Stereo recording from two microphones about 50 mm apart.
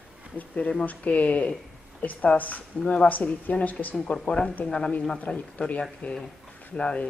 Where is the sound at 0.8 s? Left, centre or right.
Left.